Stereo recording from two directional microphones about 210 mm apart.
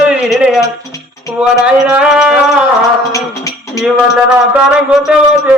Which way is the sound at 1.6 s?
5° right (ahead or behind).